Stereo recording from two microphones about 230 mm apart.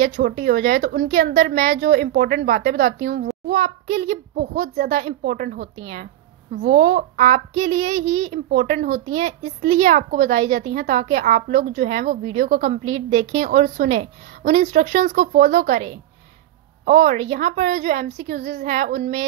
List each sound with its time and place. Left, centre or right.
0.1 s a woman's voice: right